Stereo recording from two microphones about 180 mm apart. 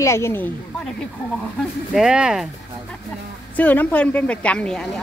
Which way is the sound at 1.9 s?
5° right (ahead or behind).